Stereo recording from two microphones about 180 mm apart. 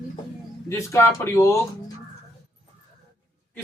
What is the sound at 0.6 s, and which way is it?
Speech, 15° left (ahead or behind).